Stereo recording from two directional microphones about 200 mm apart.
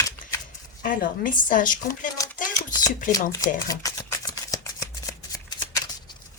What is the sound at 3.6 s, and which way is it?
Shuffling cards, 15° left (ahead or behind).